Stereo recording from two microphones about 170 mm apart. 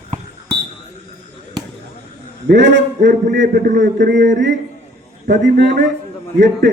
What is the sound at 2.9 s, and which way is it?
Music, 50° right (ahead or behind).